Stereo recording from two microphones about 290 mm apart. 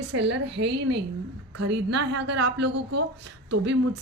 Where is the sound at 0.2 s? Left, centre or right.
Right.